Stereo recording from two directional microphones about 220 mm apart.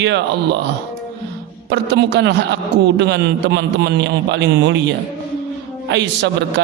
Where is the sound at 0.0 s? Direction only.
55° right (ahead or behind).